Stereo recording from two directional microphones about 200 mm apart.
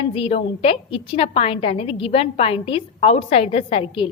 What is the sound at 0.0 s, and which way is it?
A woman's voice, 30° left (ahead or behind).